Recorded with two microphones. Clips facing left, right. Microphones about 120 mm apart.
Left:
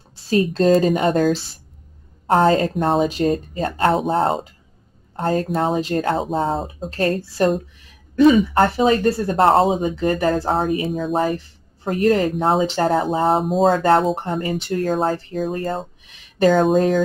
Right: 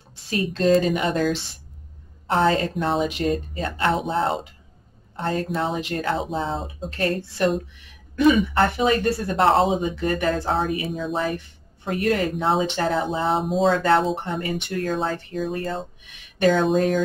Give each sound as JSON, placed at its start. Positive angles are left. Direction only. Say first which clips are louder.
{"t": 0.1, "sound": "speech", "louder": "left 7 dB", "side_deg": 35}